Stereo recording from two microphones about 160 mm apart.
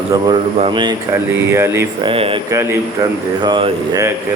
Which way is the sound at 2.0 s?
35° right (ahead or behind).